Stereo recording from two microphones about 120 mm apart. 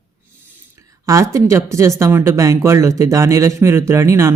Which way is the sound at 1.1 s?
25° right (ahead or behind).